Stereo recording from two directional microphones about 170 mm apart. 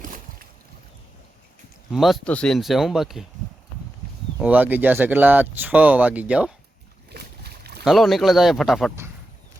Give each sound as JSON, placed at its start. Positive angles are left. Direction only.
{"t": 0.0, "sound": "a sound", "side_deg": -55}
{"t": 1.9, "sound": "speech", "side_deg": 0}
{"t": 4.4, "sound": "speech", "side_deg": -10}
{"t": 7.1, "sound": "boat", "side_deg": -70}
{"t": 7.9, "sound": "speech", "side_deg": 0}